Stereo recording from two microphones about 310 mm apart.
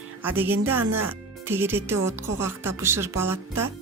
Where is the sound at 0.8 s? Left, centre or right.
Right.